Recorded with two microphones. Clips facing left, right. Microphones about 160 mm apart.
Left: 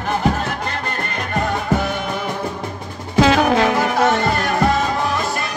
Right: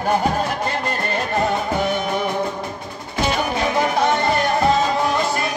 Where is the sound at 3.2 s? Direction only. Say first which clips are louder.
Left 7 dB; 90° left.